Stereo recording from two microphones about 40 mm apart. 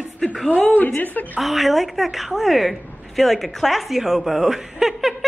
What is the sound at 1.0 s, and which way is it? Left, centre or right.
Speech, left.